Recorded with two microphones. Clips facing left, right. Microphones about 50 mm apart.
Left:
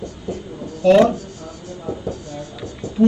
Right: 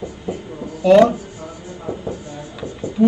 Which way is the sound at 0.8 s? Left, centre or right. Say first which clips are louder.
Right 1 dB; centre.